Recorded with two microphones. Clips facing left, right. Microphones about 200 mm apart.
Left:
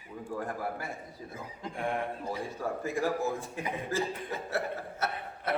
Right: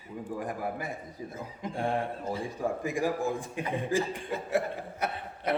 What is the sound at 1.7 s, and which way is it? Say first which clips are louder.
Speech: right 3 dB; 30° right (ahead or behind).